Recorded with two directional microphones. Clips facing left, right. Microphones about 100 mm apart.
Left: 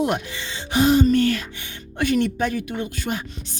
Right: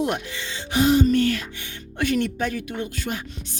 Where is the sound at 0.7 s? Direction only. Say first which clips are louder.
Left 1 dB; 35° left (ahead or behind).